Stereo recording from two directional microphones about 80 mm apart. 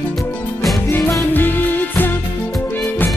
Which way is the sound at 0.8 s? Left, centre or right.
Left.